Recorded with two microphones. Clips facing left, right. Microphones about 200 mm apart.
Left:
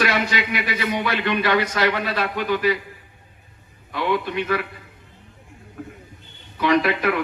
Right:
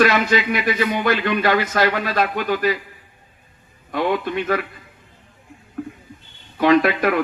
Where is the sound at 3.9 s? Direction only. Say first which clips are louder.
Right 3 dB; 50° right (ahead or behind).